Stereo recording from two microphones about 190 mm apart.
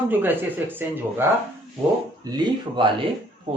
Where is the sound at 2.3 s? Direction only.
25° right (ahead or behind).